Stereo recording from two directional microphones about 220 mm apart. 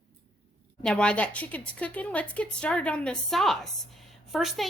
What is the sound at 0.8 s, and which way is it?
A woman's voice, 5° left (ahead or behind).